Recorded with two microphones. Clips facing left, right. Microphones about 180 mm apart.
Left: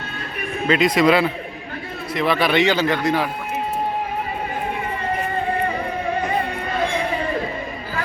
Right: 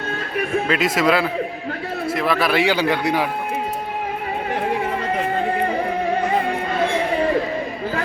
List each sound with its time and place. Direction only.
0.7 s speech: 5° right (ahead or behind)